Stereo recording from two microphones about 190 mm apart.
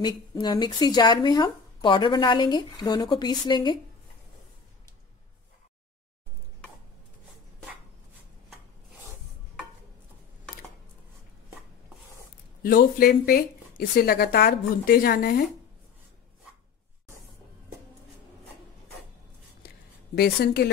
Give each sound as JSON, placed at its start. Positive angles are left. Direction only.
{"t": 0.0, "sound": "speech", "side_deg": 20}
{"t": 12.6, "sound": "speech", "side_deg": 50}
{"t": 20.2, "sound": "a woman's voice", "side_deg": 60}